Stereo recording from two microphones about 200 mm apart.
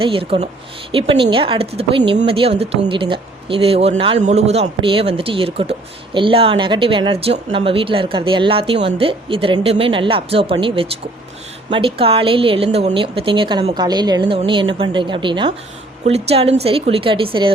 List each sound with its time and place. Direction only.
0.0 s speech: 25° right (ahead or behind)